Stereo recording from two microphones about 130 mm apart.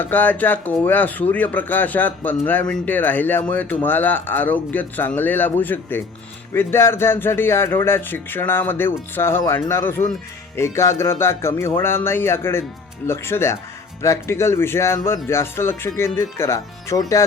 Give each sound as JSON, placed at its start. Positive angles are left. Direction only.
{"t": 0.0, "sound": "a man's voice", "side_deg": 15}